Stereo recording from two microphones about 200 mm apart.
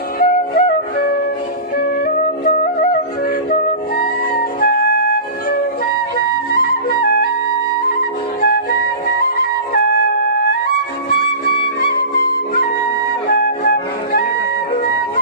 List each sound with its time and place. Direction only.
0.2 s music: 45° left (ahead or behind)
6.5 s music: 50° left (ahead or behind)
8.4 s music: 50° left (ahead or behind)
11.1 s music: 50° left (ahead or behind)